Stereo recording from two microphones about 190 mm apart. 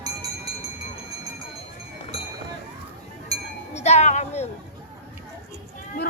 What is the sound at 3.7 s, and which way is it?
Speech, 35° left (ahead or behind).